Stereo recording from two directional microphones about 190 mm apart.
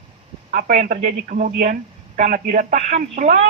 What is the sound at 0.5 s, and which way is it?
A woman's voice, 40° right (ahead or behind).